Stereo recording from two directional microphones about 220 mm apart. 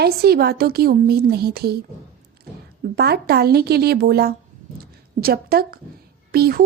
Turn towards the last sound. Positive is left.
turn(degrees=-45)  # may be behind; listen again after turning